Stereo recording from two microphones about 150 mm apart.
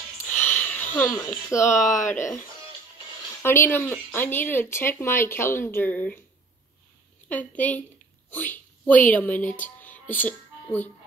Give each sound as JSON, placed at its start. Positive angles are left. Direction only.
{"t": 0.3, "sound": "a sound", "side_deg": 15}
{"t": 1.2, "sound": "speech", "side_deg": 20}
{"t": 2.0, "sound": "speech", "side_deg": 55}
{"t": 3.4, "sound": "speech", "side_deg": 15}
{"t": 7.2, "sound": "speech", "side_deg": 10}
{"t": 8.3, "sound": "a sound", "side_deg": 10}
{"t": 9.1, "sound": "speech", "side_deg": 10}
{"t": 9.6, "sound": "music", "side_deg": 10}